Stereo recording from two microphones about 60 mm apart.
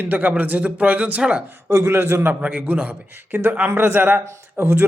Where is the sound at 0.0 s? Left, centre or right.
Right.